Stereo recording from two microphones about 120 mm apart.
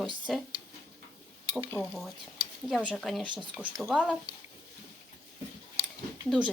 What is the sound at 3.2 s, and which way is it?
Speech, 40° right (ahead or behind).